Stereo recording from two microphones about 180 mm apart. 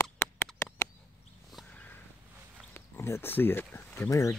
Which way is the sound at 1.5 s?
10° left (ahead or behind).